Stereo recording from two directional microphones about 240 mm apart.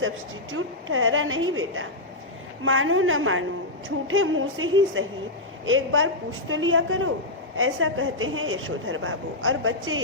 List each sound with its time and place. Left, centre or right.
0.5 s a woman's voice: right